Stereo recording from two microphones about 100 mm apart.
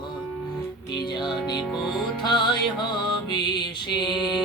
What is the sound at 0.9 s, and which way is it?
Music, 50° left (ahead or behind).